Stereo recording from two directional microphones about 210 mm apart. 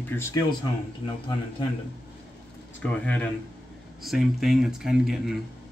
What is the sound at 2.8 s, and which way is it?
Speech, 5° left (ahead or behind).